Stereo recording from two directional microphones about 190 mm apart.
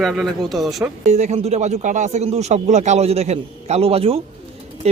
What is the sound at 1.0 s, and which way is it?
Speech, 35° right (ahead or behind).